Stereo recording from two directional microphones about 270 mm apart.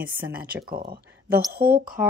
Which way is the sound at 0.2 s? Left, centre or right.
Centre.